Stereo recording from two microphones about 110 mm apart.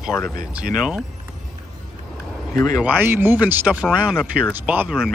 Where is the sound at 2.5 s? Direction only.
30° left (ahead or behind).